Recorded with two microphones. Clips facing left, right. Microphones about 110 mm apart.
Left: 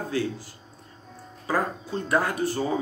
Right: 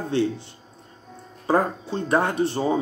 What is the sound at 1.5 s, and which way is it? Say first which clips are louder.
Speech: right 5 dB; 30° right (ahead or behind).